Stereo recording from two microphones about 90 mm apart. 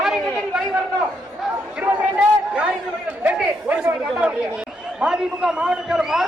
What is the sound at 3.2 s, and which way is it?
Chatter, 15° right (ahead or behind).